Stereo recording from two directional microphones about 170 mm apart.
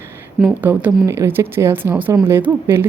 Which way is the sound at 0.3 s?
5° right (ahead or behind).